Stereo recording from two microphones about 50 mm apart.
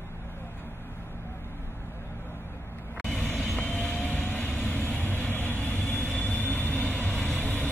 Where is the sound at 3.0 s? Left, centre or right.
Left.